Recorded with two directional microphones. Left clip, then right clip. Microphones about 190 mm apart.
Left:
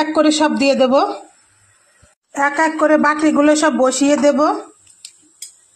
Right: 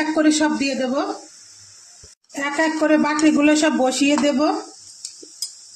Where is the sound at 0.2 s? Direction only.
15° left (ahead or behind).